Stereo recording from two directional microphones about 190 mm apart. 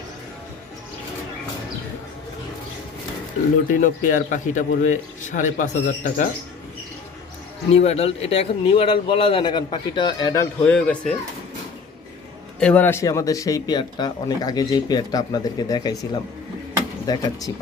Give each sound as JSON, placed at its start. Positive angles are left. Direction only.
{"t": 3.7, "sound": "speech", "side_deg": 45}
{"t": 7.7, "sound": "speech", "side_deg": 35}
{"t": 10.6, "sound": "speech", "side_deg": 5}
{"t": 12.5, "sound": "speech", "side_deg": 5}